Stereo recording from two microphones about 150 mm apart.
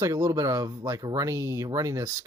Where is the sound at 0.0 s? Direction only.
20° right (ahead or behind).